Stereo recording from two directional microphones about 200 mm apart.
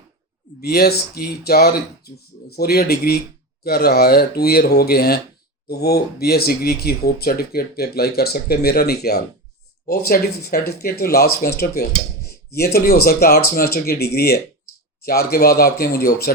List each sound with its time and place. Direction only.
0.6 s speech: 55° left (ahead or behind)